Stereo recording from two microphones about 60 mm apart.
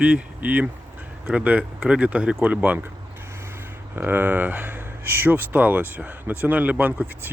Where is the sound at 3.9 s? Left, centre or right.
Right.